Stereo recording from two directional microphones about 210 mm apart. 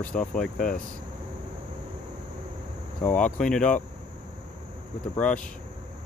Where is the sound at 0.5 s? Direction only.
40° left (ahead or behind).